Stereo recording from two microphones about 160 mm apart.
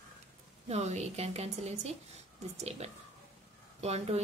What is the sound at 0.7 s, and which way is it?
A woman's voice, 40° right (ahead or behind).